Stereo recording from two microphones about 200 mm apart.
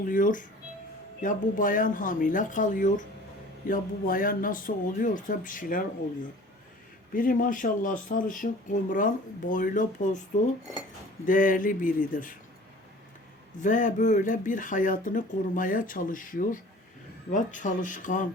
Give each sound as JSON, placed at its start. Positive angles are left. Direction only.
{"t": 0.0, "sound": "speech", "side_deg": 40}
{"t": 7.1, "sound": "speech", "side_deg": 45}
{"t": 11.3, "sound": "speech", "side_deg": 40}
{"t": 13.6, "sound": "speech", "side_deg": 40}